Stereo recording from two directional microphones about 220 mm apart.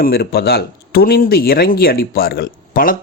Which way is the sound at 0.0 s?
45° left (ahead or behind).